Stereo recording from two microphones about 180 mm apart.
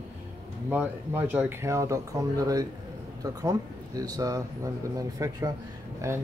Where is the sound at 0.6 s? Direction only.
10° right (ahead or behind).